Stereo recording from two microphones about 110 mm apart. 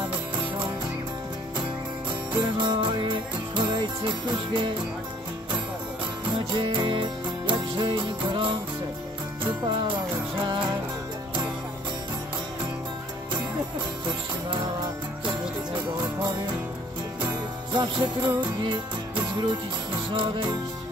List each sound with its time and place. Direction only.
2.3 s music: 40° right (ahead or behind)
6.5 s music: 45° right (ahead or behind)
9.6 s music: 45° right (ahead or behind)
14.5 s music: 45° right (ahead or behind)
17.2 s music: 45° right (ahead or behind)
20.1 s music: 50° right (ahead or behind)